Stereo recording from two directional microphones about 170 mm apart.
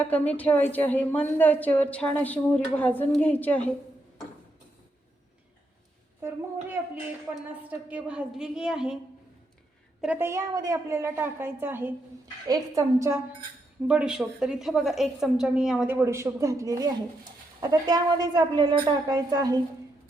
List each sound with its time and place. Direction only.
0.0 s a woman's voice: 10° left (ahead or behind)
7.7 s a woman's voice: 10° right (ahead or behind)
10.0 s a woman's voice: 10° right (ahead or behind)
13.8 s a woman's voice: 5° right (ahead or behind); by 19.5 s 20° right (ahead or behind)